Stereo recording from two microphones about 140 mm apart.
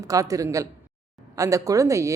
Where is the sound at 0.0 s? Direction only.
25° right (ahead or behind).